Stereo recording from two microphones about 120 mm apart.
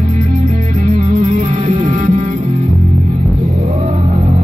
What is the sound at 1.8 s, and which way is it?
Music, 90° right.